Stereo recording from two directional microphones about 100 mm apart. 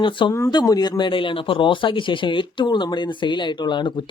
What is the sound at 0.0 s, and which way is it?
Speech, 50° left (ahead or behind).